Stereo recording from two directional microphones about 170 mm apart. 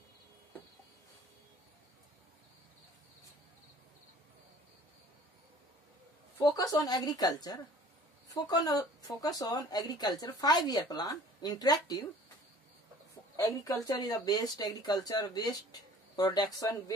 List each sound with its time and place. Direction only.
6.3 s speech: 25° left (ahead or behind)
13.4 s speech: 20° left (ahead or behind)